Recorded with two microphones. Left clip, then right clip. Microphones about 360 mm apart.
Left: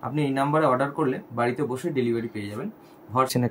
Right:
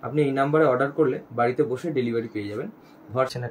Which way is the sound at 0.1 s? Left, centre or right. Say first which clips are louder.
Right 3 dB; centre.